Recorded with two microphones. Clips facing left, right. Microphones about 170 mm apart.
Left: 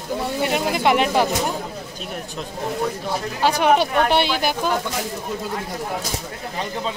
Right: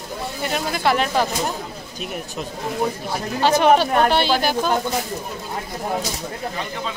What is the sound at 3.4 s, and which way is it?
A man's voice, 10° left (ahead or behind).